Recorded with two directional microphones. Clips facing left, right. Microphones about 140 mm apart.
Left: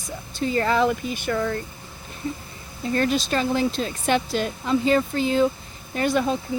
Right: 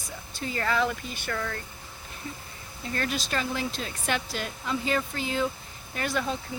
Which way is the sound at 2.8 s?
25° left (ahead or behind).